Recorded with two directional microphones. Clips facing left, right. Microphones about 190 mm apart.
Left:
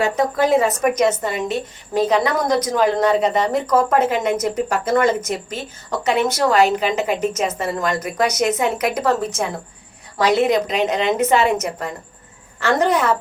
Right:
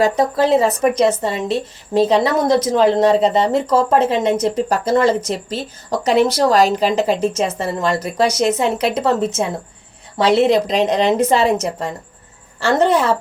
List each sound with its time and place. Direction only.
0.0 s a woman's voice: 30° right (ahead or behind)
12.5 s a woman's voice: 30° right (ahead or behind)